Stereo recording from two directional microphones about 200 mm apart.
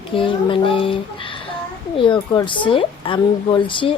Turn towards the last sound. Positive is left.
turn(degrees=25)  # may be behind; listen again after turning